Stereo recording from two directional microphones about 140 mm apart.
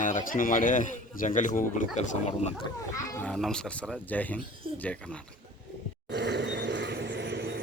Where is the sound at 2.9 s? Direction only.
20° left (ahead or behind).